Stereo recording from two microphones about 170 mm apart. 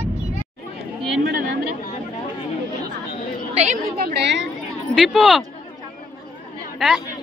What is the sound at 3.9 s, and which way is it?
Speech, 75° right (ahead or behind).